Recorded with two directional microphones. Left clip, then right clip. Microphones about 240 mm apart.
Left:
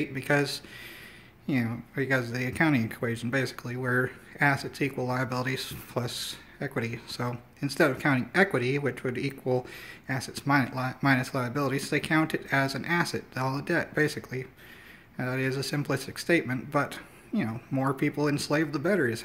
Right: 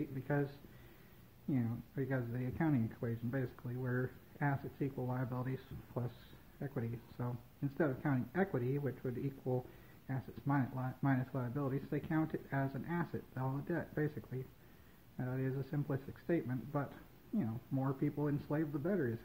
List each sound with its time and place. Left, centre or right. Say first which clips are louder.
0.1 s speech: left 13 dB; left